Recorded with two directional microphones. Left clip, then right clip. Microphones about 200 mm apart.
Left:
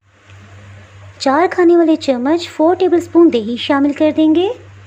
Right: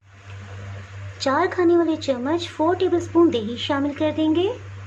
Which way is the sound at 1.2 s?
25° left (ahead or behind).